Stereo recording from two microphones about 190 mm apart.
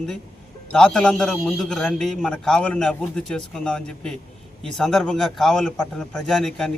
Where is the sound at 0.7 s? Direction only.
5° left (ahead or behind).